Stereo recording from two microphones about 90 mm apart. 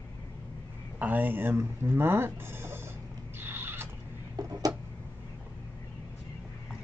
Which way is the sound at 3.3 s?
25° right (ahead or behind).